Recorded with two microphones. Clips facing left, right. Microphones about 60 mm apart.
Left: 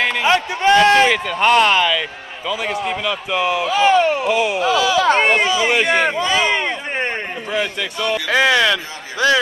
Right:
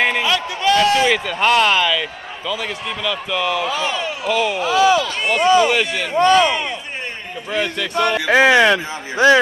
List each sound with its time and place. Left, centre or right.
0.2 s a sound: left
1.1 s speech: centre
2.9 s speech: centre
3.6 s speech: left
4.3 s speech: centre
4.6 s speech: right
5.0 s speech: left
6.1 s speech: right
6.5 s a sound: left
7.9 s speech: right
8.3 s speech: right